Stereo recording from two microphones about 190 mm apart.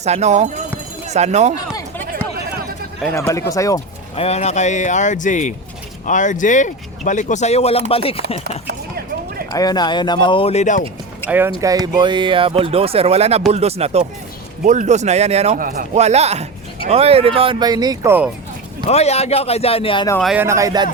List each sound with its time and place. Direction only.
0.0 s a man's voice: 35° right (ahead or behind)
3.1 s speech: 15° left (ahead or behind)
4.1 s speech: 30° left (ahead or behind)
8.6 s a sound: 55° right (ahead or behind)
9.5 s speech: 20° left (ahead or behind); by 10.8 s 40° left (ahead or behind)
11.3 s a man's voice: 10° right (ahead or behind)
18.9 s speech: 35° left (ahead or behind)
20.2 s speech: 10° right (ahead or behind)